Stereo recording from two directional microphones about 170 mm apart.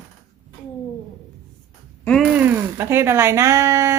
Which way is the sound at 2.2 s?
10° right (ahead or behind).